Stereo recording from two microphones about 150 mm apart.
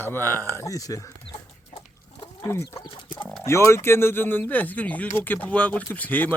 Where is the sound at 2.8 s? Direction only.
30° left (ahead or behind).